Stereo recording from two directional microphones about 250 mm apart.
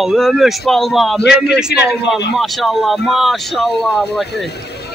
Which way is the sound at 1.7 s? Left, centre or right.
Left.